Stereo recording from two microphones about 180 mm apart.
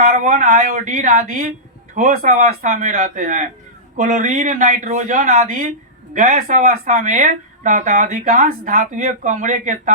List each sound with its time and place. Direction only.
0.0 s speech: 40° right (ahead or behind)